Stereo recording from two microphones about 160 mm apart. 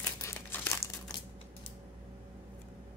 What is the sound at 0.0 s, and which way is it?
Crumpling, 15° left (ahead or behind).